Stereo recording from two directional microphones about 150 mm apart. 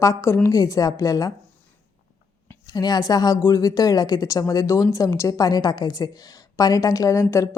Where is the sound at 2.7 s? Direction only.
25° left (ahead or behind).